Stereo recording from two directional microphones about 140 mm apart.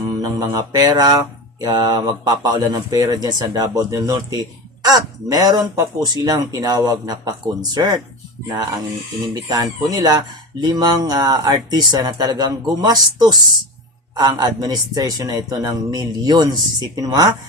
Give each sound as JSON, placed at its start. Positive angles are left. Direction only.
{"t": 0.2, "sound": "speech", "side_deg": -25}
{"t": 9.3, "sound": "speech", "side_deg": -30}